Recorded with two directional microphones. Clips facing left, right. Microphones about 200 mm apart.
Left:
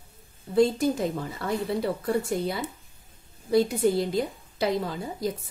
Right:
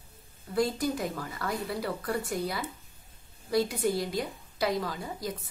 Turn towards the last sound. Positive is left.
turn(degrees=25)  # may be behind; listen again after turning